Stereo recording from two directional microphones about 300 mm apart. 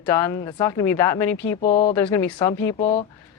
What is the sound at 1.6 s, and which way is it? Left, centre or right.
Speech, left.